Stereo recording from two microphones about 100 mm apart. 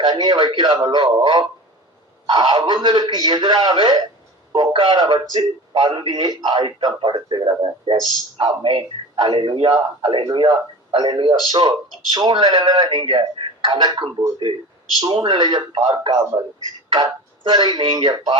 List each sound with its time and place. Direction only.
0.0 s a man's voice: 45° right (ahead or behind)